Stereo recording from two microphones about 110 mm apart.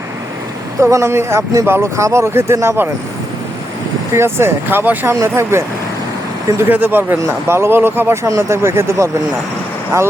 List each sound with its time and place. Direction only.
0.8 s speech: 25° right (ahead or behind)
4.1 s speech: 25° right (ahead or behind)